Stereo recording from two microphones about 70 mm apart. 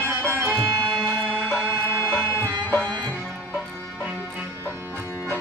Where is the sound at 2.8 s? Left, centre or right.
Centre.